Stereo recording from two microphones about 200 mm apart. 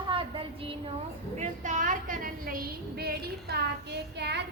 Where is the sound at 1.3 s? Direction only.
35° right (ahead or behind).